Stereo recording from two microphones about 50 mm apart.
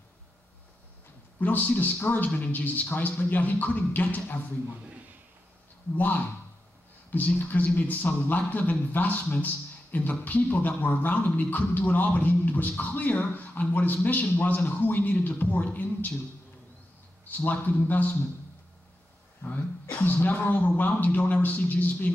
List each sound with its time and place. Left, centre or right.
1.4 s speech: left
5.9 s speech: left
17.5 s speech: left
19.4 s speech: left